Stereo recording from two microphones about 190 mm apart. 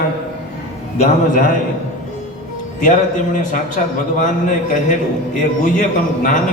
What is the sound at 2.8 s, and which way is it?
A man's voice, 45° left (ahead or behind).